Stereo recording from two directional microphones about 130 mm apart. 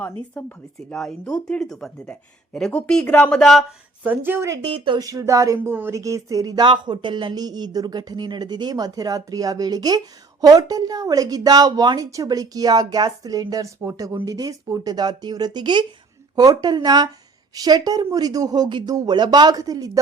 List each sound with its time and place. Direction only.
0.2 s speech: 10° left (ahead or behind)
4.0 s speech: 15° right (ahead or behind)